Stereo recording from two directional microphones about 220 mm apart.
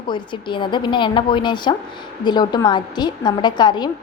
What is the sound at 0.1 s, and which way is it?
A woman's voice, 20° left (ahead or behind).